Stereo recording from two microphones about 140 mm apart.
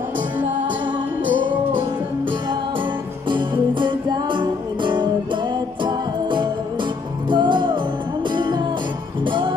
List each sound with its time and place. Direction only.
3.3 s music: 35° right (ahead or behind)